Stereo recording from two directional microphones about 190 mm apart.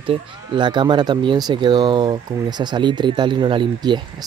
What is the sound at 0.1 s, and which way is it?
Speech, 25° right (ahead or behind).